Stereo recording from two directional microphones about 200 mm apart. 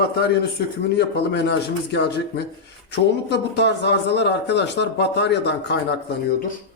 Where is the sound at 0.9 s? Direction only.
60° left (ahead or behind).